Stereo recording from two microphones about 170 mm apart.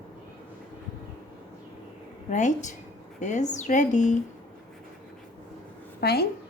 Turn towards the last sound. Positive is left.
turn(degrees=70)  # may be behind; listen again after turning